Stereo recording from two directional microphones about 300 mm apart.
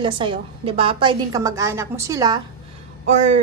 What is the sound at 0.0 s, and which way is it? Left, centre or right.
A woman's voice, centre.